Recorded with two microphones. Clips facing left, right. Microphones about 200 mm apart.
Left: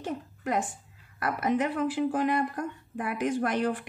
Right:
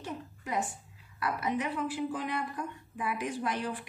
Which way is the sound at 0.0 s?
60° left (ahead or behind).